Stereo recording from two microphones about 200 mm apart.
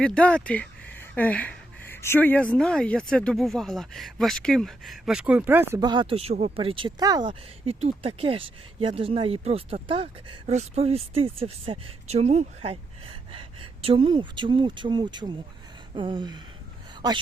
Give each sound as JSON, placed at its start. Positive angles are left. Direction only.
{"t": 0.0, "sound": "speech", "side_deg": 5}
{"t": 5.7, "sound": "speech", "side_deg": -20}